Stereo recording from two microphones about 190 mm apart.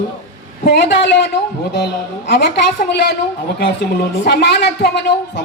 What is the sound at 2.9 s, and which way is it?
Speech, 60° left (ahead or behind).